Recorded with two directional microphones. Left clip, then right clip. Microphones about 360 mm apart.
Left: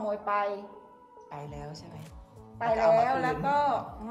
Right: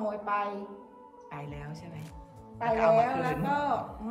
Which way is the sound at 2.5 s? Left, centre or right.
Left.